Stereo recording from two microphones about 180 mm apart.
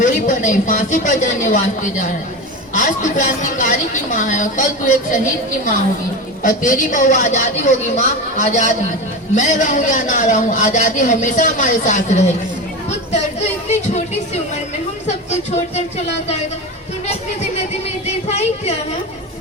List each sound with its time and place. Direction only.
0.0 s a man's voice: 45° left (ahead or behind)
6.4 s a man's voice: 45° left (ahead or behind)
15.0 s speech: 40° left (ahead or behind)
17.8 s speech: 40° left (ahead or behind)